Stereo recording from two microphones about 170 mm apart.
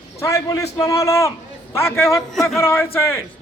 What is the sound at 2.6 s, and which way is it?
Speech, 15° left (ahead or behind).